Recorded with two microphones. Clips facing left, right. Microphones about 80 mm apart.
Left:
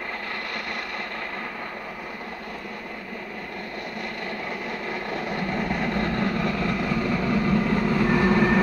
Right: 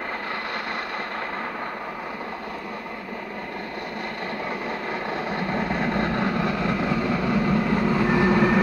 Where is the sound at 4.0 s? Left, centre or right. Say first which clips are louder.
Right 2 dB; right.